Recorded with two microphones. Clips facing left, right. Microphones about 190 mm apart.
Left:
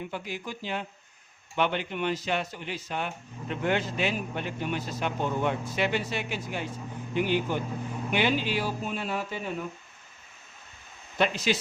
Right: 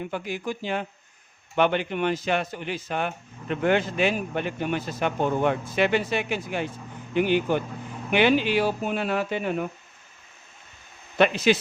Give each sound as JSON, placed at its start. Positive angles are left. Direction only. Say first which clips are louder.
{"t": 0.1, "sound": "a man's voice", "louder": "right 6 dB", "side_deg": -50}
{"t": 11.2, "sound": "a man's voice", "louder": "right 6 dB", "side_deg": -60}